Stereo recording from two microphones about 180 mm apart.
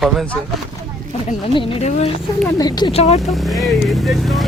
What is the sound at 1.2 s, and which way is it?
Speech, 30° left (ahead or behind).